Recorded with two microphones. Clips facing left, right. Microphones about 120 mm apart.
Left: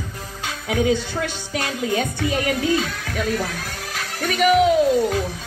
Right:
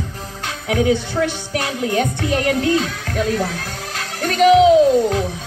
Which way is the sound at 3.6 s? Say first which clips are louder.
Right 2 dB; 5° left (ahead or behind).